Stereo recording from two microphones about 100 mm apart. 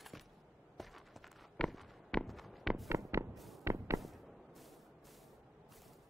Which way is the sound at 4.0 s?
Centre (ahead or behind).